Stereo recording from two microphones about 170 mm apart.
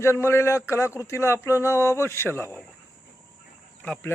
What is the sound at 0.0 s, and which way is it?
Speech, 15° left (ahead or behind).